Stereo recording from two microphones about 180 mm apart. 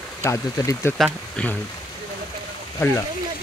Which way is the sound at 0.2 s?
15° left (ahead or behind).